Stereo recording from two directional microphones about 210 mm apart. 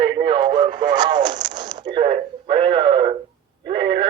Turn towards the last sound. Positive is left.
turn(degrees=-25)  # may be behind; listen again after turning